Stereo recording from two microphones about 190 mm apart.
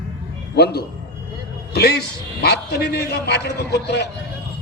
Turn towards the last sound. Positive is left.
turn(degrees=60)  # may be behind; listen again after turning